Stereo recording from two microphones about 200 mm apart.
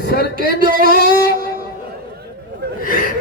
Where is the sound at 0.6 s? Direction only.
45° right (ahead or behind).